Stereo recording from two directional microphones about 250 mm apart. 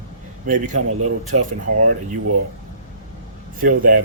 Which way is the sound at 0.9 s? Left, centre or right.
Right.